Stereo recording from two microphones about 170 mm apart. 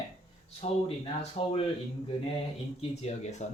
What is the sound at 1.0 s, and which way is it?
Speech, 35° left (ahead or behind).